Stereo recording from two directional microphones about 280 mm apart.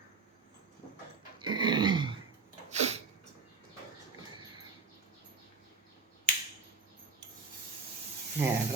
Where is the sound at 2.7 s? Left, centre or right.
Right.